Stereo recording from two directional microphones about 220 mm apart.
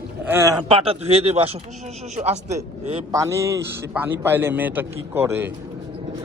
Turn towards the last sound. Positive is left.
turn(degrees=-10)  # may be behind; listen again after turning